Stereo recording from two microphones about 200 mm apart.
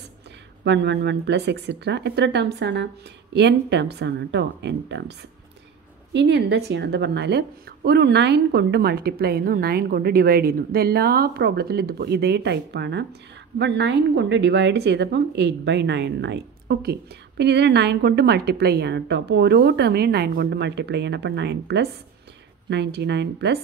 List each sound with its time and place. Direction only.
0.7 s a woman's voice: 60° right (ahead or behind)
6.1 s a woman's voice: 60° right (ahead or behind)